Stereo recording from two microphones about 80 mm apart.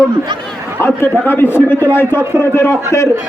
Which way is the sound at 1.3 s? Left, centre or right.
Left.